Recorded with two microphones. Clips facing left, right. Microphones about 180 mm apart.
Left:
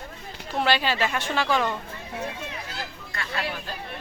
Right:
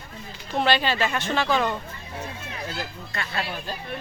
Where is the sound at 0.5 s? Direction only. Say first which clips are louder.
Right 1 dB; 5° left (ahead or behind).